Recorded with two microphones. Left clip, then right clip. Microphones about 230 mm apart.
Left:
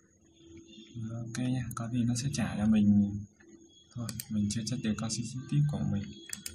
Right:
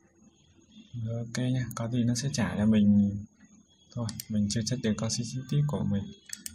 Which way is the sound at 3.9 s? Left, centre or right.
Right.